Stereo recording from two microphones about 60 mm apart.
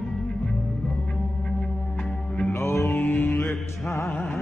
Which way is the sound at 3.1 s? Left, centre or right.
Left.